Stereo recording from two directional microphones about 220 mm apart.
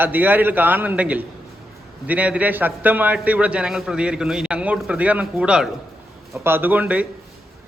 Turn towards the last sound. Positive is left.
turn(degrees=-5)  # may be behind; listen again after turning